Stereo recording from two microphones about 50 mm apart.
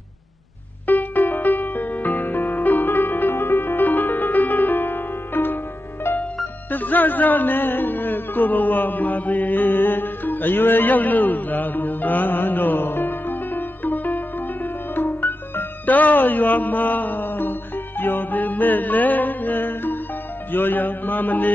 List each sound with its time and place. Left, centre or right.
0.8 s music: left
6.7 s music: left
20.5 s mantra: left